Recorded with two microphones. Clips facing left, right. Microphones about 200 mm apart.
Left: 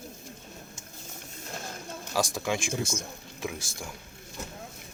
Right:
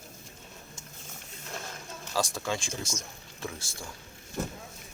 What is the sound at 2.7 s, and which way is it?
Speech, 55° left (ahead or behind).